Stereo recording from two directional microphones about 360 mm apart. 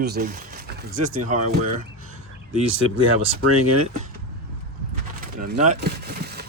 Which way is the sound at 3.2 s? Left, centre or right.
Right.